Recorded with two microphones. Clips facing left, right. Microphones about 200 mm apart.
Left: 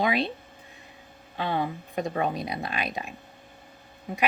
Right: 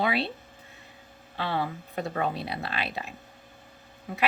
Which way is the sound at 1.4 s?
15° left (ahead or behind).